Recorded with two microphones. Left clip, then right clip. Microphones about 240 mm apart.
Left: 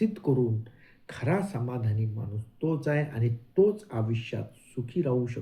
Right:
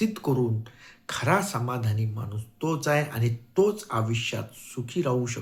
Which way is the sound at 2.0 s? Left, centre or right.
Right.